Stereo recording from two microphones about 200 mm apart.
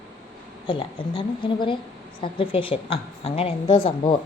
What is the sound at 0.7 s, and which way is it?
Speech, 25° left (ahead or behind).